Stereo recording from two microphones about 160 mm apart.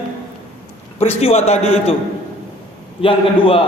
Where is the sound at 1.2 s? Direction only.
40° left (ahead or behind).